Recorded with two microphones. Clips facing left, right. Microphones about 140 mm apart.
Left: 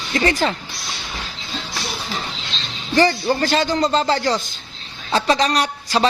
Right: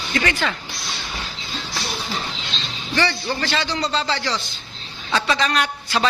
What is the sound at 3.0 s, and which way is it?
A man's voice, 45° left (ahead or behind).